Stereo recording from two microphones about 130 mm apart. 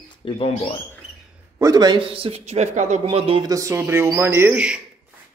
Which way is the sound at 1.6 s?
30° right (ahead or behind).